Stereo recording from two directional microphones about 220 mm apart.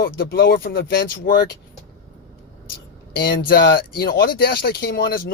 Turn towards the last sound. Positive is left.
turn(degrees=40)  # may be behind; listen again after turning